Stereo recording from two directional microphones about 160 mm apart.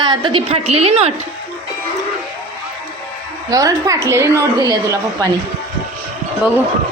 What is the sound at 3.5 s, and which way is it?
A woman's voice, 20° right (ahead or behind).